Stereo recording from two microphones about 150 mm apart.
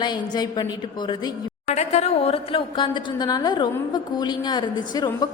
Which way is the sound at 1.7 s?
50° left (ahead or behind).